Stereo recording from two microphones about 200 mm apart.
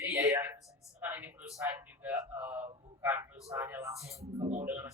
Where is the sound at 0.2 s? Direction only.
15° right (ahead or behind).